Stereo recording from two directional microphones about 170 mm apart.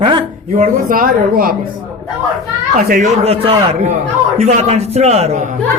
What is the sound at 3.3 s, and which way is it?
A man's voice, 35° right (ahead or behind).